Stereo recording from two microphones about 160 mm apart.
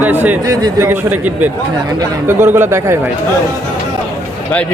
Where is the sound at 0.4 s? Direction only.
20° right (ahead or behind).